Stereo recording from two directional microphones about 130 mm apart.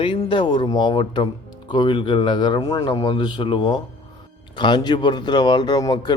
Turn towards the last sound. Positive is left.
turn(degrees=35)  # may be behind; listen again after turning